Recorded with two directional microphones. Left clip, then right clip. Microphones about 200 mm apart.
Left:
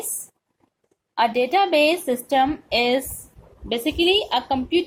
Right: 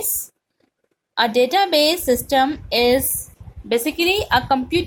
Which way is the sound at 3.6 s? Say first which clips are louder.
Right 2 dB; 55° right (ahead or behind).